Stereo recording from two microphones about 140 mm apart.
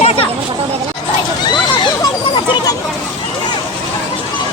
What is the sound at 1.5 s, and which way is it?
Hubbub, 30° left (ahead or behind).